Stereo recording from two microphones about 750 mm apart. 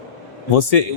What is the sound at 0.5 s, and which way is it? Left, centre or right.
Speech, left.